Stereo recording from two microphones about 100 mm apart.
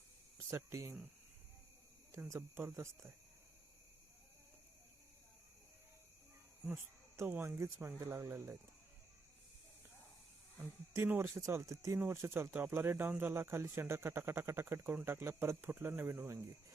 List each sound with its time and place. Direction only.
0.3 s a sound: 25° right (ahead or behind)
2.1 s speech: 30° right (ahead or behind)
7.2 s speech: 20° right (ahead or behind)
10.6 s speech: 30° right (ahead or behind)